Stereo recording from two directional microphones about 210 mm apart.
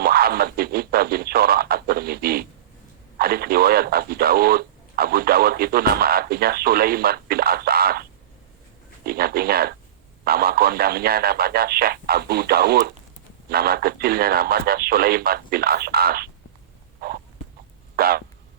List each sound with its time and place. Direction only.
0.0 s speech: 45° right (ahead or behind)
9.0 s speech: 45° right (ahead or behind)
17.9 s a sound: 45° right (ahead or behind)